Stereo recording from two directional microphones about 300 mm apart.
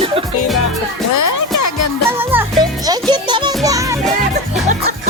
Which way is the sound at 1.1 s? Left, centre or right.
Left.